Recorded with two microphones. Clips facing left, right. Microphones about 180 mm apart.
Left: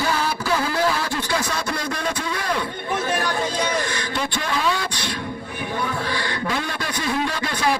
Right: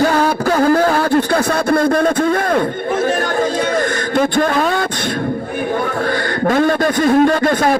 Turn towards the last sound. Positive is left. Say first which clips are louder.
# right 10 dB
turn(degrees=-50)  # may be behind; listen again after turning